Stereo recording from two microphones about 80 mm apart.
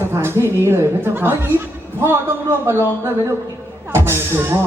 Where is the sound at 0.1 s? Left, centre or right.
Right.